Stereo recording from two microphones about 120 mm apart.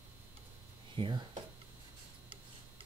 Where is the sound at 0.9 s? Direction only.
45° right (ahead or behind).